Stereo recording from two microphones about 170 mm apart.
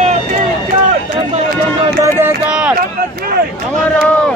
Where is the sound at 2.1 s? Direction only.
15° right (ahead or behind).